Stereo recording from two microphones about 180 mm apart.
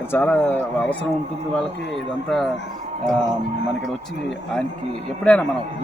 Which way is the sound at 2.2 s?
Centre (ahead or behind).